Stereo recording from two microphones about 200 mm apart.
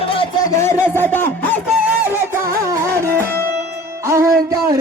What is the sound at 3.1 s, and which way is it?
Music, 10° left (ahead or behind).